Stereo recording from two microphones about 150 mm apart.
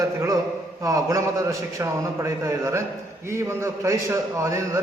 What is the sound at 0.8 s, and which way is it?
A man's voice, 20° right (ahead or behind).